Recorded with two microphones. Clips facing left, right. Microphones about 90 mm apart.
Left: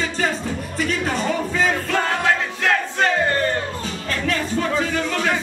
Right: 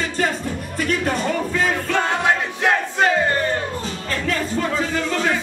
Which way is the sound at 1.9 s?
20° right (ahead or behind).